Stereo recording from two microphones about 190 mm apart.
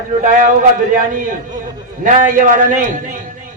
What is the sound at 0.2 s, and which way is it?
Speech, 45° right (ahead or behind).